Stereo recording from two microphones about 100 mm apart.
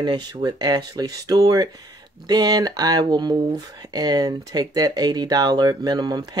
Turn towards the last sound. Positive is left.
turn(degrees=-40)  # may be behind; listen again after turning